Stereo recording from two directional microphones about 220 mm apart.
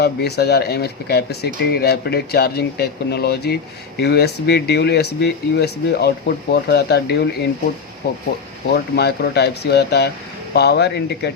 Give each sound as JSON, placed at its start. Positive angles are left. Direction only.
{"t": 0.0, "sound": "speech", "side_deg": 45}
{"t": 8.7, "sound": "speech", "side_deg": 50}